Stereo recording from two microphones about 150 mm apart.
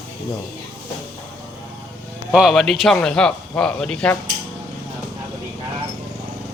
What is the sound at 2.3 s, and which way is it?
Speech, centre (ahead or behind).